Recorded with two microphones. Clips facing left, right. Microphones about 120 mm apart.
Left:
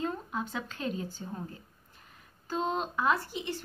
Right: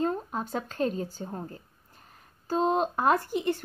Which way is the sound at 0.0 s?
40° right (ahead or behind).